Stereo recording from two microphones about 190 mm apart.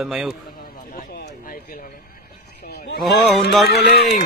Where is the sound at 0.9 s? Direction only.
45° left (ahead or behind).